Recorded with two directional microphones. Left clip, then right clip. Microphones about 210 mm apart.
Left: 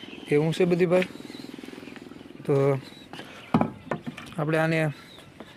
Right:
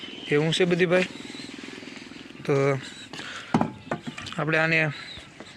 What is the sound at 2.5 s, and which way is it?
Speech, 5° left (ahead or behind).